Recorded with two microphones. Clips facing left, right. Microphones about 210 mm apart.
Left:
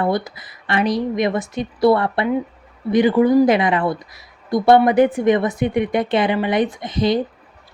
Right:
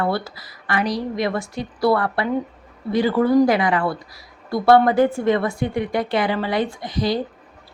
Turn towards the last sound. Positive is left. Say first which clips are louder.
# left 3 dB
turn(degrees=20)  # may be behind; listen again after turning